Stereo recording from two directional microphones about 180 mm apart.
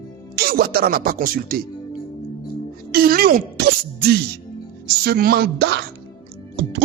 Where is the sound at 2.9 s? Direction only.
55° right (ahead or behind).